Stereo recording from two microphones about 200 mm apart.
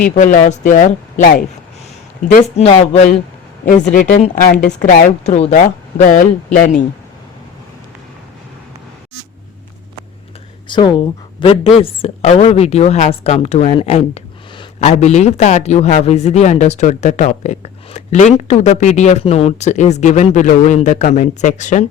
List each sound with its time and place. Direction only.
0.0 s a man's voice: 40° left (ahead or behind)
2.3 s a man's voice: 30° left (ahead or behind)
10.7 s a man's voice: 25° left (ahead or behind)